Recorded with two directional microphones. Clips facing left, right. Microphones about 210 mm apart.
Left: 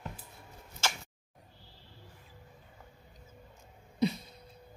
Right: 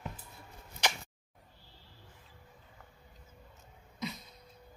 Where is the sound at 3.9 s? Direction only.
30° left (ahead or behind).